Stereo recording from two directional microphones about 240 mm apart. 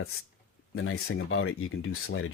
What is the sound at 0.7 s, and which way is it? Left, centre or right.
Speech, left.